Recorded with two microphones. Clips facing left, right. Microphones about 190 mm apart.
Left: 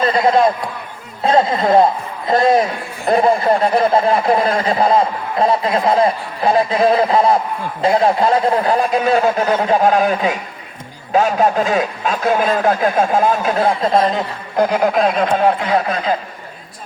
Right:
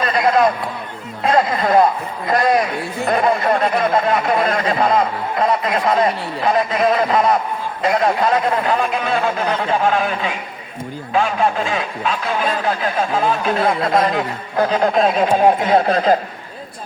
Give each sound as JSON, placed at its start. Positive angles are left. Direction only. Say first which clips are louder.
{"t": 0.0, "sound": "a man's voice", "louder": "left 2 dB", "side_deg": 30}
{"t": 13.9, "sound": "speech", "louder": "left 2 dB", "side_deg": 25}
{"t": 14.6, "sound": "speech", "louder": "left 1 dB", "side_deg": 10}
{"t": 15.6, "sound": "a man's voice", "louder": "right 3 dB", "side_deg": -30}